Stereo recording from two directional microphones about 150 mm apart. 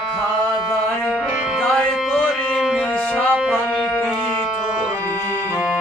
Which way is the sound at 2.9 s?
10° left (ahead or behind).